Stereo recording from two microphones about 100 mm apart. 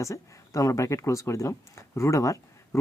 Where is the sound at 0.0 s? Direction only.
35° left (ahead or behind).